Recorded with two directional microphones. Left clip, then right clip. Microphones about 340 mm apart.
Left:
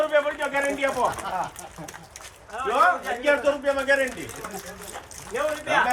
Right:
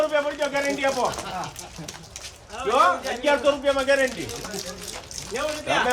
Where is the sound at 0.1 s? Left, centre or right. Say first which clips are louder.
Left 1 dB; centre.